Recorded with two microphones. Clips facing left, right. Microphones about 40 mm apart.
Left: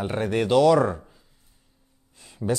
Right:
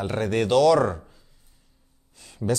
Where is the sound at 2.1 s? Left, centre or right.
Left.